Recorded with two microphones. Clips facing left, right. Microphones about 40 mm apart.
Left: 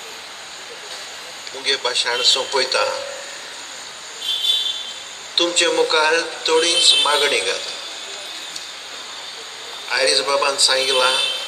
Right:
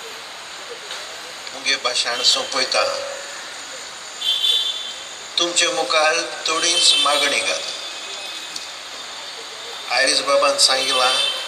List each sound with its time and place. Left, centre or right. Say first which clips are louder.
1.6 s a man's voice: left 1 dB; left
5.3 s a man's voice: left 2 dB; left
9.8 s a man's voice: even; left